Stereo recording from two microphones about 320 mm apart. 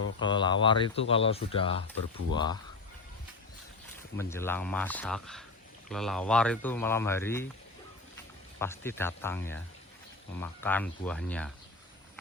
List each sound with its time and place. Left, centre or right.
0.2 s speech: centre
4.2 s speech: centre
8.5 s speech: centre